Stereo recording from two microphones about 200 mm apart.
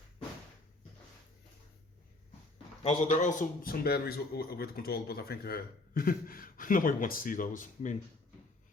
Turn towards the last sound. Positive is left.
turn(degrees=40)  # may be behind; listen again after turning